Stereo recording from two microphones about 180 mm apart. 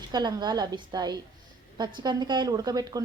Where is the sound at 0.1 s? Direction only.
25° right (ahead or behind).